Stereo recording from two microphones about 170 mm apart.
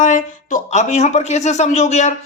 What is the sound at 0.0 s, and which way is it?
Speech, 45° left (ahead or behind).